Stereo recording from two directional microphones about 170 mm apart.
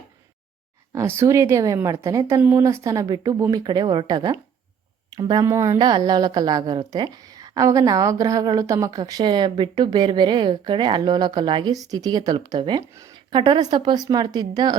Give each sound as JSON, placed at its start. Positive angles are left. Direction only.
{"t": 0.9, "sound": "a woman's voice", "side_deg": -15}